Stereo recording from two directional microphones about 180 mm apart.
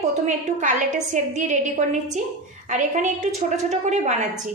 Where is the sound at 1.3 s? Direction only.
40° right (ahead or behind).